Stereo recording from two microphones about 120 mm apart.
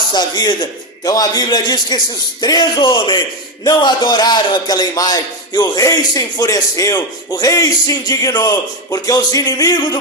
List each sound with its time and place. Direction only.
0.1 s a man's voice: 35° left (ahead or behind)